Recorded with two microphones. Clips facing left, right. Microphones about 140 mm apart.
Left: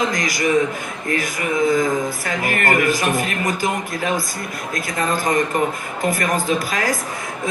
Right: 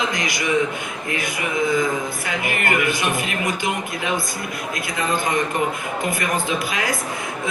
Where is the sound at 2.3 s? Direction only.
40° left (ahead or behind).